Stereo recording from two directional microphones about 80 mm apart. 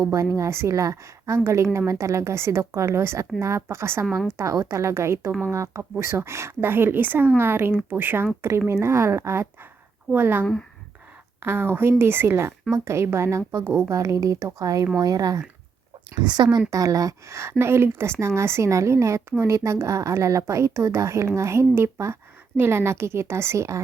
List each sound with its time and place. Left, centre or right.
0.3 s speech: right
11.4 s speech: right
13.7 s speech: right
13.9 s speech: right
16.3 s speech: right
16.6 s speech: right